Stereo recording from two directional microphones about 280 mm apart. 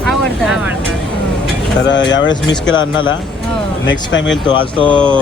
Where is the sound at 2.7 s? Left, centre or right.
Centre.